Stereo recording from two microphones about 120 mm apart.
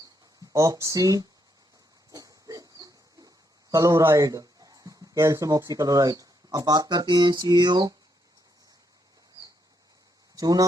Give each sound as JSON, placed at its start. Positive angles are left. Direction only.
{"t": 0.5, "sound": "speech", "side_deg": -25}
{"t": 2.1, "sound": "a sound", "side_deg": -30}
{"t": 10.3, "sound": "speech", "side_deg": -30}